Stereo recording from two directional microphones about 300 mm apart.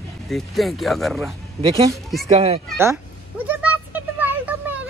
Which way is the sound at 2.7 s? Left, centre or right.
Centre.